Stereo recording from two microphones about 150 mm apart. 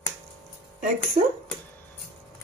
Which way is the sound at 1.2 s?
45° right (ahead or behind).